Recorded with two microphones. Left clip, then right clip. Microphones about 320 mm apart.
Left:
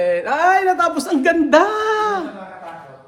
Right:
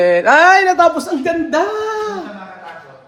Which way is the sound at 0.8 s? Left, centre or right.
Centre.